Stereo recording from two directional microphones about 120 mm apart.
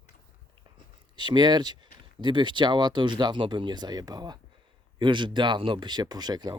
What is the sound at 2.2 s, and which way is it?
Speech, 40° right (ahead or behind).